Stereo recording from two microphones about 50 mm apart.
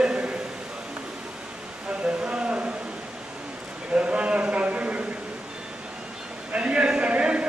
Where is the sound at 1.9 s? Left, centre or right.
Right.